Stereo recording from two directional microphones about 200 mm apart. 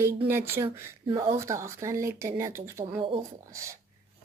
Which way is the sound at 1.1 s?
25° right (ahead or behind).